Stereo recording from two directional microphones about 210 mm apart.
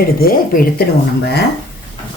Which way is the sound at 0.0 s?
45° left (ahead or behind).